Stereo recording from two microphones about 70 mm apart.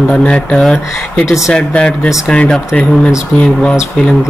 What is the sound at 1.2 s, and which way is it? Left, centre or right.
Speech, left.